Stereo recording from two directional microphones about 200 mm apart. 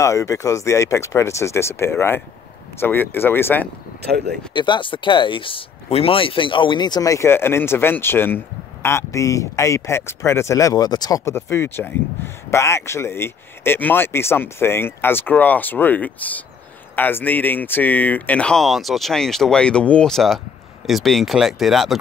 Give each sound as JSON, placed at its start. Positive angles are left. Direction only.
{"t": 0.0, "sound": "speech", "side_deg": 15}
{"t": 4.0, "sound": "speech", "side_deg": -55}
{"t": 4.6, "sound": "speech", "side_deg": 25}